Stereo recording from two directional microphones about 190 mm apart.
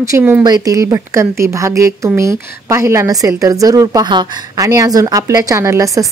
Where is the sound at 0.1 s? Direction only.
10° right (ahead or behind).